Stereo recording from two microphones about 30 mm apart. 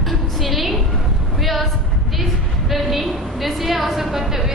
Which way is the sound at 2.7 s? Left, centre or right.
Centre.